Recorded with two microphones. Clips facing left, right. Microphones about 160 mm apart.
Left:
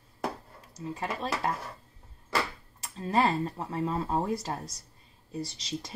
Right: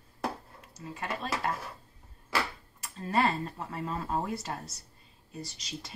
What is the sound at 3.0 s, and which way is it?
A woman's voice, 35° left (ahead or behind).